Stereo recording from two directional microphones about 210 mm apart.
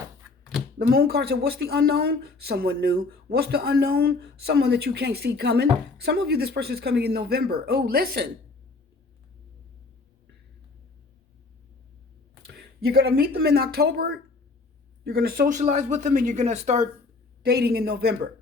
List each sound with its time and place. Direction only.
0.8 s speech: 45° right (ahead or behind)
12.5 s speech: 50° right (ahead or behind); by 16.8 s 35° right (ahead or behind)
17.4 s speech: 50° right (ahead or behind)